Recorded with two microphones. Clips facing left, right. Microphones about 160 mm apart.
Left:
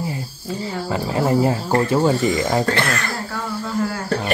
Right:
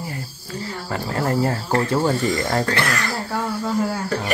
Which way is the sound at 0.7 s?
15° left (ahead or behind).